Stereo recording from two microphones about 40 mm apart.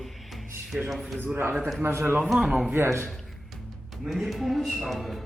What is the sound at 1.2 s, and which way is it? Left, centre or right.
Speech, right.